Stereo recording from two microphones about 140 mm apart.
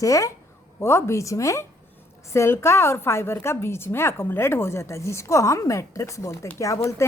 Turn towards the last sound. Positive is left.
turn(degrees=20)  # may be behind; listen again after turning